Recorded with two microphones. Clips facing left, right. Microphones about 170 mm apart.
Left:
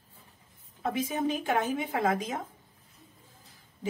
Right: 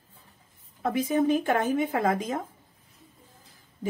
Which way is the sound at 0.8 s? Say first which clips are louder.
Right 5 dB; 55° right (ahead or behind).